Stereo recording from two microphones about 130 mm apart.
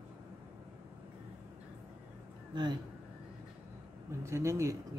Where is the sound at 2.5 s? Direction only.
35° right (ahead or behind).